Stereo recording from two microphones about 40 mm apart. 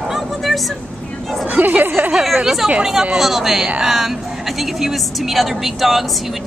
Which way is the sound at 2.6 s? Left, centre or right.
Centre.